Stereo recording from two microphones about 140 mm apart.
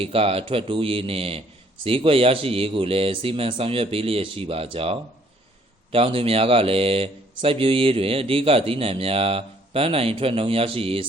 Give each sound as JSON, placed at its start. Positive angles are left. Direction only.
{"t": 0.0, "sound": "speech", "side_deg": -45}